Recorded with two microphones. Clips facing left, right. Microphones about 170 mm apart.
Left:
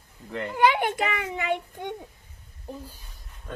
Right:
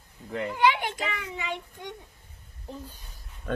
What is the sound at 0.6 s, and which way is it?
A child's voice, 50° left (ahead or behind).